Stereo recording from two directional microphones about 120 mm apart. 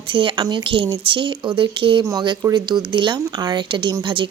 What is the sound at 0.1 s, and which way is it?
Speech, 45° right (ahead or behind).